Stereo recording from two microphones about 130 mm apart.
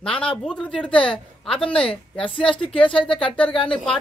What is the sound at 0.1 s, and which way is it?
Speech, 45° left (ahead or behind).